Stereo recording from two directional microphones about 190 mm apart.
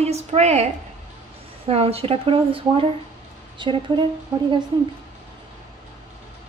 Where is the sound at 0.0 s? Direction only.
35° right (ahead or behind).